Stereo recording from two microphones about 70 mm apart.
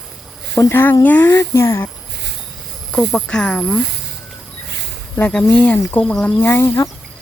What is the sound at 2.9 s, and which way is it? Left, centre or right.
Speech, centre.